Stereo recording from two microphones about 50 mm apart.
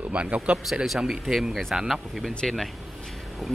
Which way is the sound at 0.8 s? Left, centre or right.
Centre.